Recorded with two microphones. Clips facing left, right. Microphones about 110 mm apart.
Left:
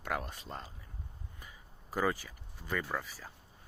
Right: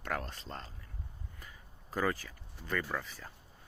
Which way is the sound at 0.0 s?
10° left (ahead or behind).